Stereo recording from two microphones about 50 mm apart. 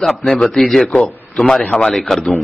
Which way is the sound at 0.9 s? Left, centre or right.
Centre.